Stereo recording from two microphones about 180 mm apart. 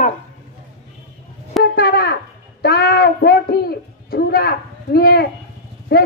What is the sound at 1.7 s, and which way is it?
A man's voice, 60° left (ahead or behind).